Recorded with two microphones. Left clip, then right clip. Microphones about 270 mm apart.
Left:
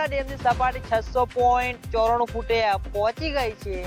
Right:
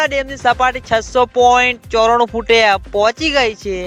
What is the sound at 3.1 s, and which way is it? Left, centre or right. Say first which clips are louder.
Speech: right 12 dB; right.